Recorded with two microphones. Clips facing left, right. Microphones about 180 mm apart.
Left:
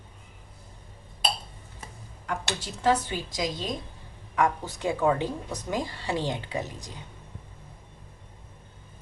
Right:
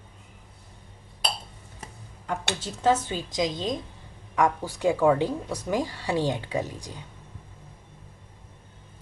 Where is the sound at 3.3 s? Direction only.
20° right (ahead or behind).